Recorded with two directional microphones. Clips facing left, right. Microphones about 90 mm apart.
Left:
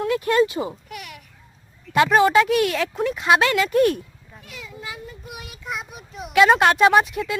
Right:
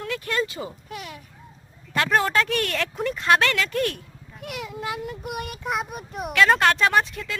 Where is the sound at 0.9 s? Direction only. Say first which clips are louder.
Right 1 dB; 25° right (ahead or behind).